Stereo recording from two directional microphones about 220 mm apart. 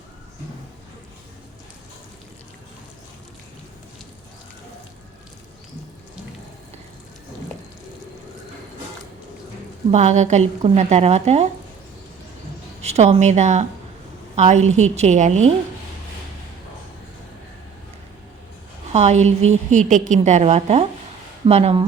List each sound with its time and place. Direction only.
9.9 s a woman's voice: 30° right (ahead or behind)
12.8 s a woman's voice: 30° right (ahead or behind)
18.9 s a woman's voice: 30° right (ahead or behind)